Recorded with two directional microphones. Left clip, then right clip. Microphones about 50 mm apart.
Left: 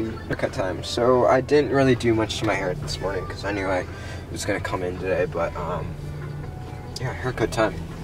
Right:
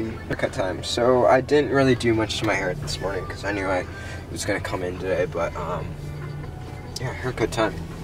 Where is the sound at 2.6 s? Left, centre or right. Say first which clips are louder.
Even; centre.